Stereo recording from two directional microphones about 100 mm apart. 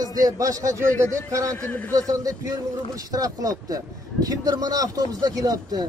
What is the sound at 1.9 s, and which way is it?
Speech, 35° right (ahead or behind).